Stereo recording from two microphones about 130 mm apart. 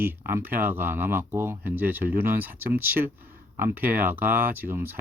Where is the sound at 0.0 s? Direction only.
15° right (ahead or behind).